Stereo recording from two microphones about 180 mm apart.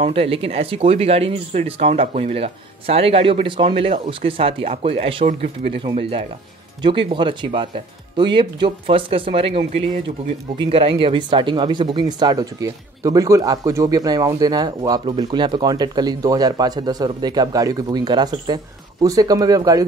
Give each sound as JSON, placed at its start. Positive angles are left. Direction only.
{"t": 0.0, "sound": "speech", "side_deg": -30}